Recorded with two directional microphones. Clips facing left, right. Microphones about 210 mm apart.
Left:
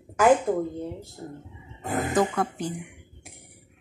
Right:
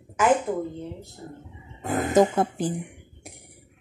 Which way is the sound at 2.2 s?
25° right (ahead or behind).